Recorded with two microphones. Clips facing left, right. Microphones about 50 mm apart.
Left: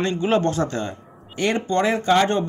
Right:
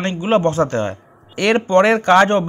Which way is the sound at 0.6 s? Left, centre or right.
Right.